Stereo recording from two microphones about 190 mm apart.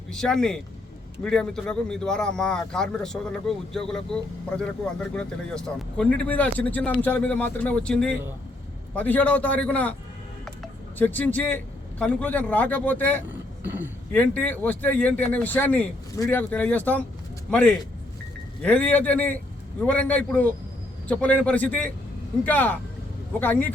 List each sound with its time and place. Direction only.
0.1 s speech: 5° left (ahead or behind)
13.7 s a man's voice: 10° right (ahead or behind)
14.1 s speech: 10° left (ahead or behind)